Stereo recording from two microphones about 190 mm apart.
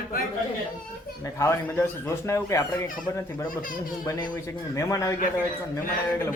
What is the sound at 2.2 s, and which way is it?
Speech, 15° left (ahead or behind).